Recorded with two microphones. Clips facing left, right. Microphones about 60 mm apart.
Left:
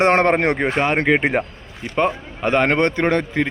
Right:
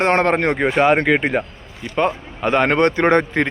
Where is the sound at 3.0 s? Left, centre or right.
Right.